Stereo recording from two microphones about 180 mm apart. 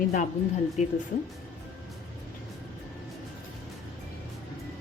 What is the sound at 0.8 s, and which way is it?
Speech, 45° left (ahead or behind).